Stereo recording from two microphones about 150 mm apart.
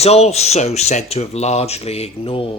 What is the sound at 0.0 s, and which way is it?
Speech, 45° left (ahead or behind).